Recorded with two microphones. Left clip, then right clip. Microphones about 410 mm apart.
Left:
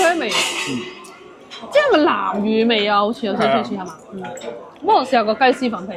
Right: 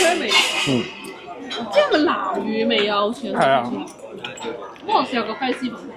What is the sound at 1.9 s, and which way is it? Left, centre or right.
Speech, left.